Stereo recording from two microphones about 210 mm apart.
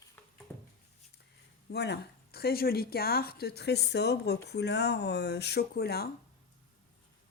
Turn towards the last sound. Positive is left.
turn(degrees=50)  # may be behind; listen again after turning